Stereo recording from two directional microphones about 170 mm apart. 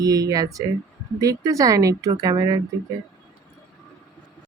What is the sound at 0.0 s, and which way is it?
Speech, 20° right (ahead or behind).